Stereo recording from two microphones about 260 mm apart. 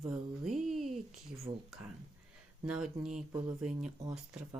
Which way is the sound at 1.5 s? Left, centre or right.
Right.